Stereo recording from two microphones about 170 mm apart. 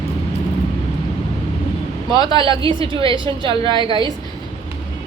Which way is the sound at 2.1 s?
25° left (ahead or behind).